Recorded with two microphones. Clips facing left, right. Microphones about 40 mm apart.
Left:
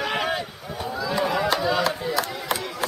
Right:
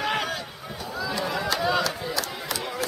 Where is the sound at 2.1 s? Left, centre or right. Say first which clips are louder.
Left 4 dB; left.